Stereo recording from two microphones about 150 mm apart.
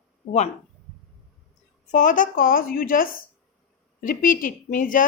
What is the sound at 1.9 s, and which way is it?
A woman's voice, 60° left (ahead or behind).